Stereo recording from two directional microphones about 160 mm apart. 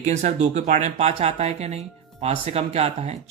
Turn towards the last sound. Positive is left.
turn(degrees=-40)  # may be behind; listen again after turning